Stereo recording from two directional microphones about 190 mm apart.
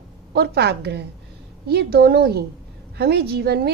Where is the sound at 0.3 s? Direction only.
60° right (ahead or behind).